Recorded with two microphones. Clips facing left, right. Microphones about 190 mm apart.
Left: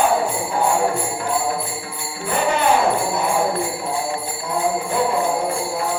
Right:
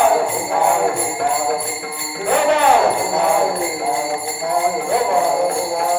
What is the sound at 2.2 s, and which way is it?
Jingle bell, 65° right (ahead or behind).